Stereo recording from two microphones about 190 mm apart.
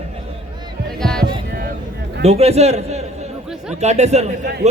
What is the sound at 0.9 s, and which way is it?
Music, 5° left (ahead or behind).